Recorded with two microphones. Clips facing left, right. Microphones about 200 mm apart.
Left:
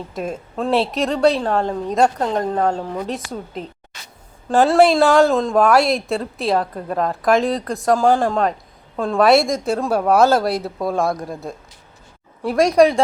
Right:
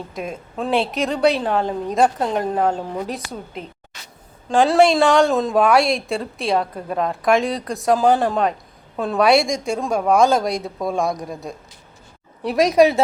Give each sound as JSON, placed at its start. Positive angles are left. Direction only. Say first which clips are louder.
{"t": 0.1, "sound": "speech", "louder": "left 3 dB", "side_deg": -5}